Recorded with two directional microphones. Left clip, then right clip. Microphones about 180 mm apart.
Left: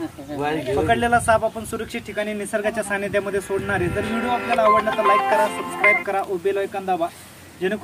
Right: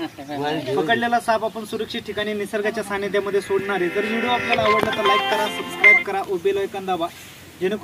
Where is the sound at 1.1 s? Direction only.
25° left (ahead or behind).